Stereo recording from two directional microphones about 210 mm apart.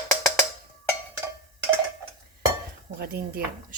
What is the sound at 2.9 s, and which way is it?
Speech, 45° right (ahead or behind).